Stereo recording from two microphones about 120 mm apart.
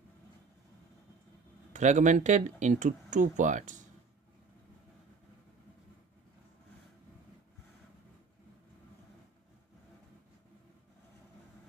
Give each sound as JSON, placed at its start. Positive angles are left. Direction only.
{"t": 1.7, "sound": "speech", "side_deg": -90}